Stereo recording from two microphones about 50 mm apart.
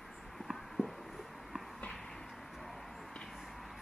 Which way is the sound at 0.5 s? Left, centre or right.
Centre.